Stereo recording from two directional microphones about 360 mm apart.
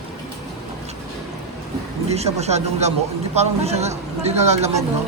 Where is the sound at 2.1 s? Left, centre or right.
Centre.